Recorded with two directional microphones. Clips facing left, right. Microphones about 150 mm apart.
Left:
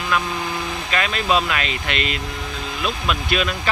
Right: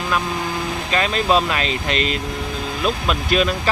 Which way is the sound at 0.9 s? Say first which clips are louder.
Right 3 dB; 35° right (ahead or behind).